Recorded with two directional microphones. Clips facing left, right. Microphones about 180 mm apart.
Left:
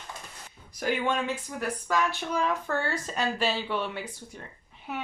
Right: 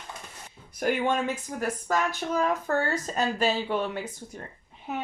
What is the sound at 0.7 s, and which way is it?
Speech, 50° right (ahead or behind).